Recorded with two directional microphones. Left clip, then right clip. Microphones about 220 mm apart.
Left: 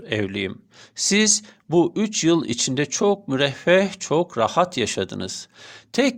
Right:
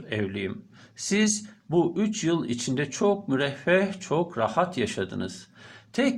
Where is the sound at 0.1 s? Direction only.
40° left (ahead or behind).